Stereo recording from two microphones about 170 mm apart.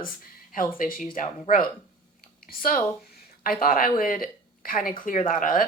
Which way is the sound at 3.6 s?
55° left (ahead or behind).